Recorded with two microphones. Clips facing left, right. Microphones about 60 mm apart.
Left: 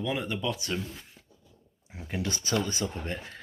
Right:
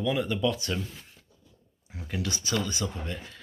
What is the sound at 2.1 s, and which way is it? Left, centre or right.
Speech, left.